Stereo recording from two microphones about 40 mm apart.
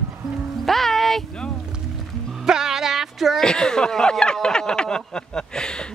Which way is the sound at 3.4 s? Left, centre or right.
Centre.